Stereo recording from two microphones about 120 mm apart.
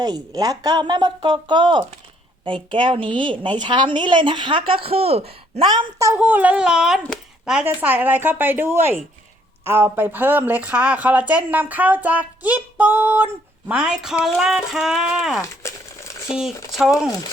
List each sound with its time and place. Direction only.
0.0 s a woman's voice: 35° right (ahead or behind); by 5.6 s 55° right (ahead or behind)
5.6 s a woman's voice: 25° right (ahead or behind)
6.1 s speech: 15° right (ahead or behind)
15.6 s speech: 25° left (ahead or behind)